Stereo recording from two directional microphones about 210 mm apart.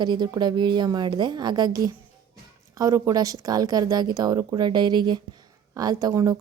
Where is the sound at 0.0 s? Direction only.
20° right (ahead or behind).